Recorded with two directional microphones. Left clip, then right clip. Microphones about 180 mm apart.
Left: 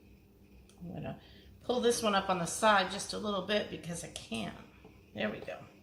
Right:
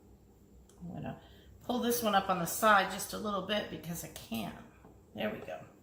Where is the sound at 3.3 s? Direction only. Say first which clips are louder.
Left 2 dB; 30° left (ahead or behind).